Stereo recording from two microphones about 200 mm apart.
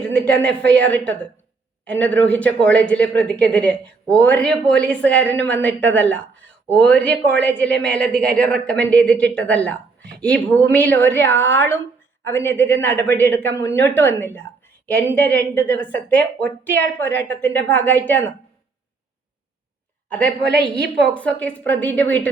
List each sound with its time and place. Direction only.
0.0 s speech: 5° left (ahead or behind)
20.1 s a woman's voice: 5° left (ahead or behind)
20.4 s a woman's voice: 60° right (ahead or behind)
21.1 s speech: 5° left (ahead or behind)